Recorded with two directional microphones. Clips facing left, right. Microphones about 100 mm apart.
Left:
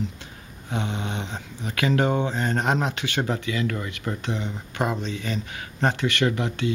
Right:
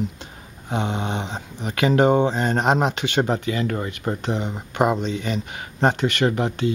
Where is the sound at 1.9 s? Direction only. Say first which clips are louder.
Right 6 dB; 20° right (ahead or behind).